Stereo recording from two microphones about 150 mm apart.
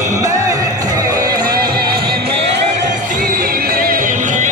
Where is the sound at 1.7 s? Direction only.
90° right.